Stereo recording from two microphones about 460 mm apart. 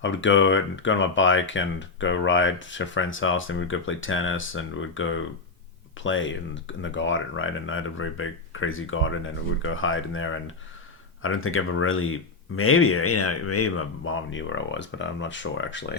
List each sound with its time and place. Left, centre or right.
0.0 s speech: left